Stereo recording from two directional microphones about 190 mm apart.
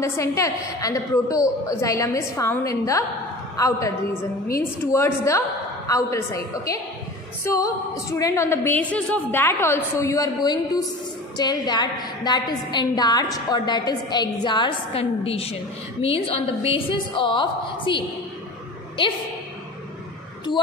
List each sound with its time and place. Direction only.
0.0 s a woman's voice: 15° left (ahead or behind)